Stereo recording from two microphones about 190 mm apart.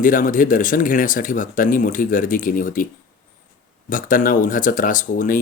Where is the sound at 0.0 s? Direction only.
45° left (ahead or behind).